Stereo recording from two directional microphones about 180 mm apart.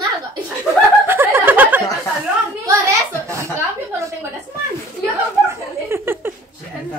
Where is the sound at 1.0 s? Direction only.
15° right (ahead or behind).